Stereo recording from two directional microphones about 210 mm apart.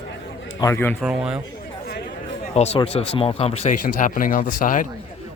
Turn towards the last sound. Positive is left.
turn(degrees=40)  # may be behind; listen again after turning